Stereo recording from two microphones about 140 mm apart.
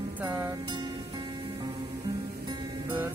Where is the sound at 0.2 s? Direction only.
15° right (ahead or behind).